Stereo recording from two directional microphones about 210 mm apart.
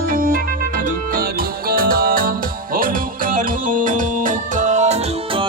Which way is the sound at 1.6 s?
45° right (ahead or behind).